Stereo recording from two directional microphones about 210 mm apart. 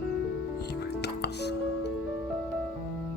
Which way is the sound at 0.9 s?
50° left (ahead or behind).